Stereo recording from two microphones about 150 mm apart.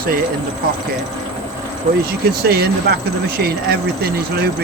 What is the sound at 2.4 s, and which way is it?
Speech, 90° right.